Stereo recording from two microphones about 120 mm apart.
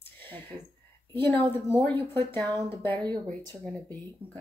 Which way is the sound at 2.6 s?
15° left (ahead or behind).